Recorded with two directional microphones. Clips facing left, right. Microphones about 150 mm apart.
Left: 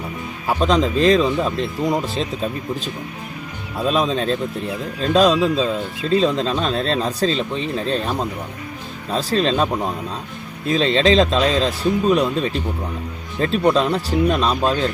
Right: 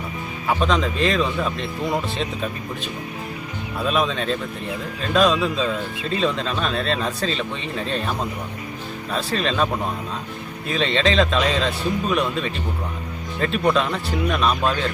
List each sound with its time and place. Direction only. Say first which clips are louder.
0.6 s speech: left 6 dB; 35° left (ahead or behind)
3.8 s speech: left 3 dB; 35° left (ahead or behind)
9.1 s speech: left 4 dB; 35° left (ahead or behind)
10.7 s speech: left 5 dB; 35° left (ahead or behind)